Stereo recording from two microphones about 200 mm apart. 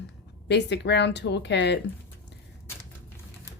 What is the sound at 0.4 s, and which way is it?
Speech, 60° left (ahead or behind).